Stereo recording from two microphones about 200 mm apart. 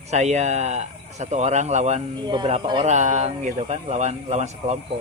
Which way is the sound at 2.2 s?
20° right (ahead or behind).